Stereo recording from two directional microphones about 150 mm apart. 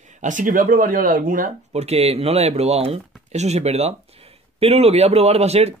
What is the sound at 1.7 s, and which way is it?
Speech, 45° right (ahead or behind).